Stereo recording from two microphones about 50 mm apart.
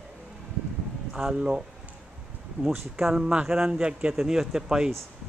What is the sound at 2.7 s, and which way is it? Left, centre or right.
A man's voice, centre.